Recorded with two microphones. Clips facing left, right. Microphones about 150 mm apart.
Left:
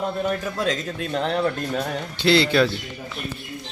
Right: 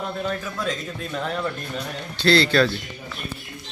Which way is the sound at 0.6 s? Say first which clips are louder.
Left 3 dB; 70° left (ahead or behind).